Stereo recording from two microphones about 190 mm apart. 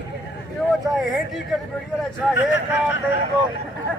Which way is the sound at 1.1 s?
Centre (ahead or behind).